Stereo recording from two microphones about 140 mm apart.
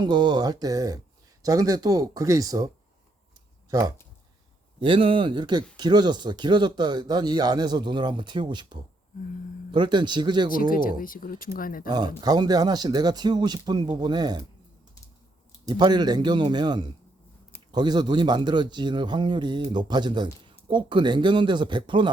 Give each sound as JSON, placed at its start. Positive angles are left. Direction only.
{"t": 0.0, "sound": "speech", "side_deg": -30}
{"t": 3.7, "sound": "speech", "side_deg": -25}
{"t": 4.8, "sound": "speech", "side_deg": -40}
{"t": 10.5, "sound": "speech", "side_deg": 85}
{"t": 11.9, "sound": "speech", "side_deg": -30}
{"t": 15.6, "sound": "speech", "side_deg": -30}